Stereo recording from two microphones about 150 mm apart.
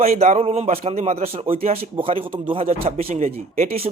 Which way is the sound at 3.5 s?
75° right (ahead or behind).